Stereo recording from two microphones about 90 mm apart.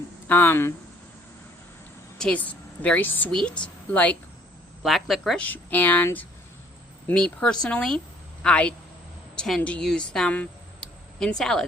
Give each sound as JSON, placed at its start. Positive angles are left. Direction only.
{"t": 0.3, "sound": "speech", "side_deg": 25}
{"t": 2.1, "sound": "a woman's voice", "side_deg": 10}
{"t": 4.8, "sound": "speech", "side_deg": 0}
{"t": 5.4, "sound": "speech", "side_deg": 20}
{"t": 7.1, "sound": "a woman's voice", "side_deg": 10}